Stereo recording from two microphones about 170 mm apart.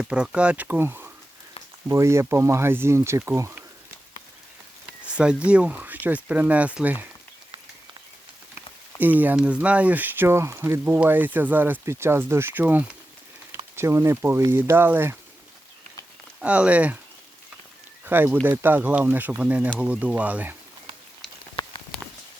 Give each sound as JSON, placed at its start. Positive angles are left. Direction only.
{"t": 0.0, "sound": "speech", "side_deg": -5}
{"t": 5.1, "sound": "speech", "side_deg": -5}
{"t": 9.0, "sound": "speech", "side_deg": -10}
{"t": 16.4, "sound": "speech", "side_deg": -5}
{"t": 18.0, "sound": "speech", "side_deg": -10}